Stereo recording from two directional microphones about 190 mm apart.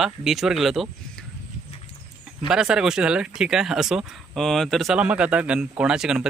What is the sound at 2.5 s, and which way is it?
Speech, 5° right (ahead or behind).